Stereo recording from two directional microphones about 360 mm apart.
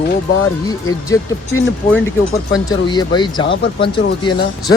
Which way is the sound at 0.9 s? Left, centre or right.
Centre.